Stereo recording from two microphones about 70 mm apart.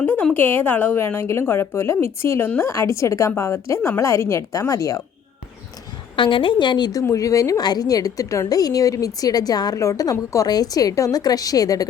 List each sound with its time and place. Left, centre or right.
0.0 s a sound: left
0.3 s a woman's voice: left
1.0 s a woman's voice: left
6.6 s speech: left
7.1 s a woman's voice: left
7.6 s a woman's voice: left
9.8 s a woman's voice: left